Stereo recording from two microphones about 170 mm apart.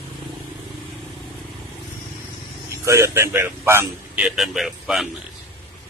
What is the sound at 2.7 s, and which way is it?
A man's voice, 15° right (ahead or behind).